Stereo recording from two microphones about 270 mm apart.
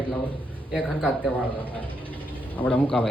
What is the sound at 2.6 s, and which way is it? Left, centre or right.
Speech, centre.